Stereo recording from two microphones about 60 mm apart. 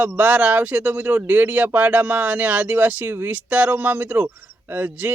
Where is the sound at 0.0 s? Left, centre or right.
Right.